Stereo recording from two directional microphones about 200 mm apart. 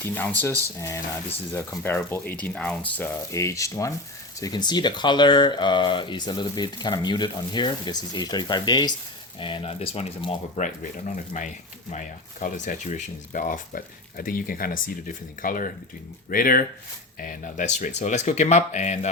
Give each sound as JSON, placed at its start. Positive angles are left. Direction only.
{"t": 0.0, "sound": "speech", "side_deg": 10}